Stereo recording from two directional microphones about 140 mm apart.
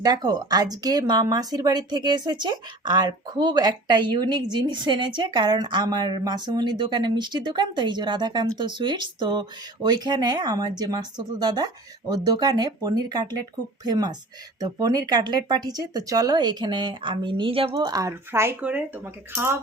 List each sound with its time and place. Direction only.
0.0 s speech: 30° right (ahead or behind)
17.7 s speech: 25° right (ahead or behind)